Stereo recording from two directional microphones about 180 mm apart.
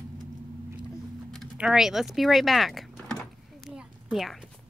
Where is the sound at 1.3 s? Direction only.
5° right (ahead or behind).